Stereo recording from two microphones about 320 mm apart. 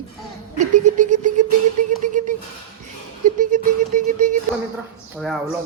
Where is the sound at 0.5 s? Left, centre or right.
Right.